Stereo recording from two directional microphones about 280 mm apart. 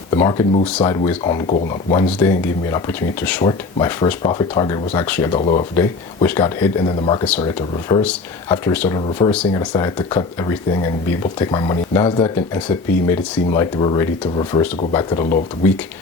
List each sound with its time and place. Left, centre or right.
0.1 s speech: centre
5.3 s speech: left
5.7 s speech: centre